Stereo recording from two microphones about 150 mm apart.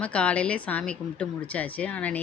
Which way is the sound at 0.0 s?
10° left (ahead or behind).